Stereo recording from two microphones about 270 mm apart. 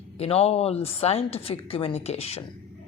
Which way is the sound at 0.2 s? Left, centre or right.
Left.